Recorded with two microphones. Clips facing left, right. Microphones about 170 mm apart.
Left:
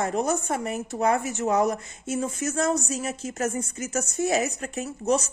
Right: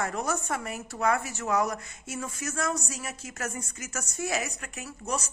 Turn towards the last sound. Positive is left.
turn(degrees=25)  # may be behind; listen again after turning